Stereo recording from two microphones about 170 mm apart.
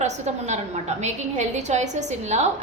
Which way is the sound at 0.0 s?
40° right (ahead or behind).